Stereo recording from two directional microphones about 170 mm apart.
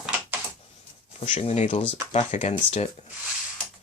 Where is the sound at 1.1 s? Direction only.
35° left (ahead or behind).